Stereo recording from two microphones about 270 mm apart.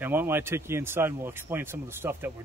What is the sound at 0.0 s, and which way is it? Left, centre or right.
Speech, centre.